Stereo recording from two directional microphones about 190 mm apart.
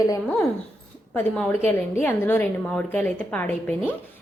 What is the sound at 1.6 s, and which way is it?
A woman's voice, 10° left (ahead or behind).